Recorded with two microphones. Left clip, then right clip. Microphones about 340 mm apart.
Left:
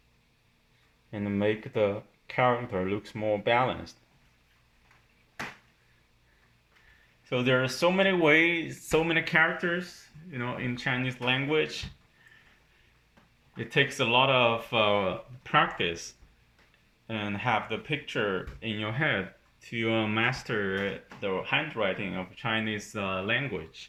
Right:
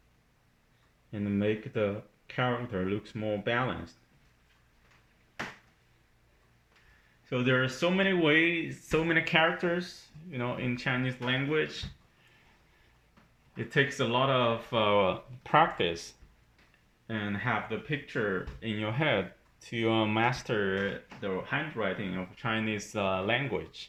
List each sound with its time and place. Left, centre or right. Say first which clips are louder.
1.1 s speech: left 2 dB; centre
7.3 s speech: left 2 dB; centre
13.6 s speech: left 2 dB; centre
15.4 s speech: right 1 dB; centre
17.1 s speech: left 3 dB; centre